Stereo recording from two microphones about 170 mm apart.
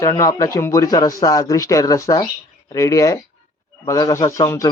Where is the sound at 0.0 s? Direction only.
20° left (ahead or behind).